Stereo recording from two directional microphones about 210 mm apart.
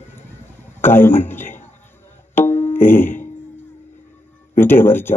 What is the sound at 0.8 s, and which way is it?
Speech, 10° left (ahead or behind).